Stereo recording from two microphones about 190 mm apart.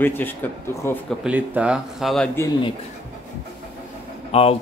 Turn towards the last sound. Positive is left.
turn(degrees=30)  # may be behind; listen again after turning